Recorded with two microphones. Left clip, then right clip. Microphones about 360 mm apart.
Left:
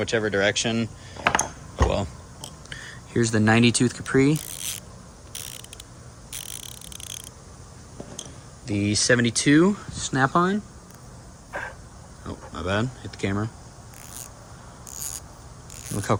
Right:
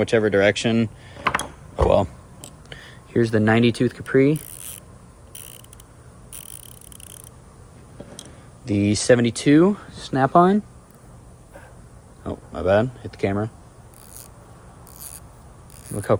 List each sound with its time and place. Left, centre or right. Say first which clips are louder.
0.0 s speech: right 5 dB; centre
1.7 s a sound: right 8 dB; centre
2.6 s speech: left 2 dB; centre
8.6 s speech: right 4 dB; centre
12.2 s speech: right 8 dB; centre